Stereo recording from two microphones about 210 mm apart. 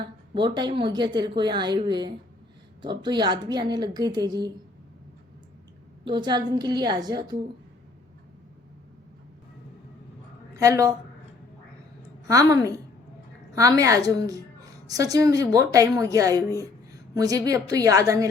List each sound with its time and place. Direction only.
0.3 s a woman's voice: 20° right (ahead or behind)
6.1 s a woman's voice: 20° right (ahead or behind)
10.5 s a woman's voice: 15° right (ahead or behind)
12.3 s a woman's voice: 15° right (ahead or behind)